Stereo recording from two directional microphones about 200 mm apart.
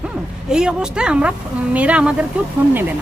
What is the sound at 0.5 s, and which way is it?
Speech, 5° right (ahead or behind).